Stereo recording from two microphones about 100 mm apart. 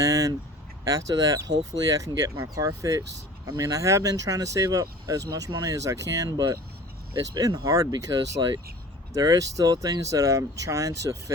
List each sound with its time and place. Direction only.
0.0 s speech: 35° right (ahead or behind)